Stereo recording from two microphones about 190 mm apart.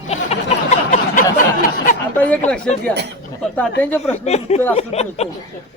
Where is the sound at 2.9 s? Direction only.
60° right (ahead or behind).